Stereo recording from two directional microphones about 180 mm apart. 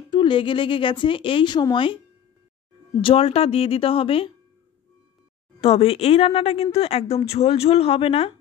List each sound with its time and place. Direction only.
0.1 s a woman's voice: 30° left (ahead or behind)
3.0 s speech: 30° left (ahead or behind)
5.6 s speech: 35° left (ahead or behind)